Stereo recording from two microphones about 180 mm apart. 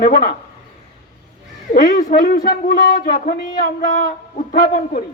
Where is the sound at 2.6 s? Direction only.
55° left (ahead or behind).